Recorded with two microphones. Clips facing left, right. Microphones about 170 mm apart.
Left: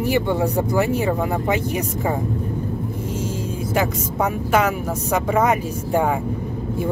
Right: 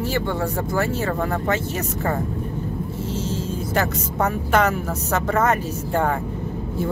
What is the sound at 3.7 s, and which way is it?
Speech, 10° left (ahead or behind).